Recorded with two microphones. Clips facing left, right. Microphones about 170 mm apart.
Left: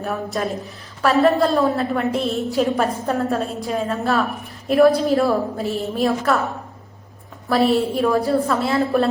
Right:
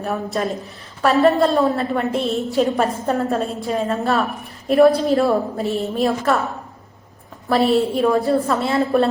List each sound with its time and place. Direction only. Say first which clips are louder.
0.0 s a woman's voice: right 1 dB; centre (ahead or behind)
7.5 s a woman's voice: right 1 dB; centre (ahead or behind)